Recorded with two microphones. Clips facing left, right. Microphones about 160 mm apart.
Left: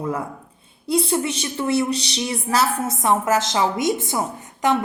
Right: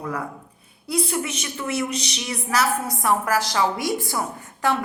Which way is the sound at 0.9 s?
30° left (ahead or behind).